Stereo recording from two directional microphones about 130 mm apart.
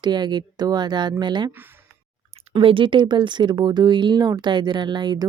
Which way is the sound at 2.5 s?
40° right (ahead or behind).